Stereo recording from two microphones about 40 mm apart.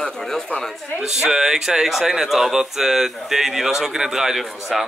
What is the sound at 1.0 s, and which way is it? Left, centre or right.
Speech, centre.